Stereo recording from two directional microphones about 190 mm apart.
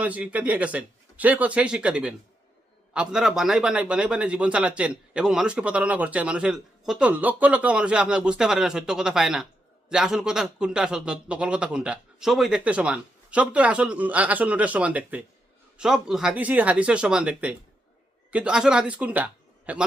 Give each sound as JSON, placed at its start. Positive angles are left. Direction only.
{"t": 0.0, "sound": "a man's voice", "side_deg": -5}